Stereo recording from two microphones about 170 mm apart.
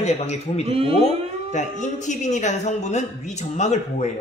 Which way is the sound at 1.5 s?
45° left (ahead or behind).